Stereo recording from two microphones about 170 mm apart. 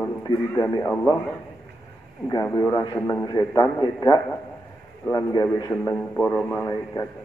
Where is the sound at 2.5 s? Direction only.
20° left (ahead or behind).